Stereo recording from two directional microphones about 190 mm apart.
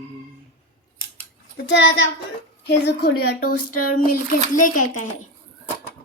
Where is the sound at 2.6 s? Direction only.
55° left (ahead or behind).